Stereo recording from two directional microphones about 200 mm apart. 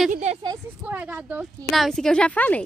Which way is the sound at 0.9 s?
10° right (ahead or behind).